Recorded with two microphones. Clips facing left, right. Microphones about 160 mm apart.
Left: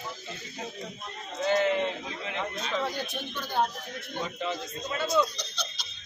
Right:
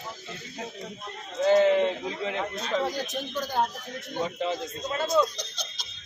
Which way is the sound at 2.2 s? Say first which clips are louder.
Right 3 dB; 35° right (ahead or behind).